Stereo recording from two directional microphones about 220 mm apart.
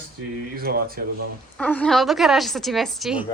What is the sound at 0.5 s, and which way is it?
Speech, 45° right (ahead or behind).